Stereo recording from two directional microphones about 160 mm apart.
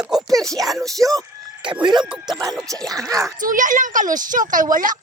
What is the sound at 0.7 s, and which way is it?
Speech, centre (ahead or behind).